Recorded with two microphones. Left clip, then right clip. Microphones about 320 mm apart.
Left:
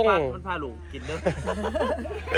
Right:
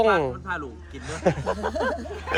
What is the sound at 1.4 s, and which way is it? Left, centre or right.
Speech, right.